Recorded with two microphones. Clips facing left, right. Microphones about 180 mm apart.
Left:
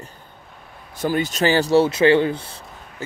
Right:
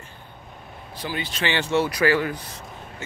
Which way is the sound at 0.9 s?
45° left (ahead or behind).